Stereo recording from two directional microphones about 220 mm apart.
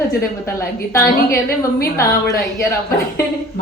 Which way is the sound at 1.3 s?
45° left (ahead or behind).